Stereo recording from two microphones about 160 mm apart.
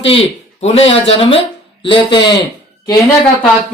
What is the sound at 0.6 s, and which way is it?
Speech, 40° left (ahead or behind).